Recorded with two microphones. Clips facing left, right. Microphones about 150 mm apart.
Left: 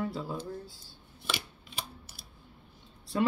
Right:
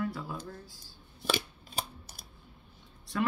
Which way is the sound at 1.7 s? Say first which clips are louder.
Right 4 dB; 40° right (ahead or behind).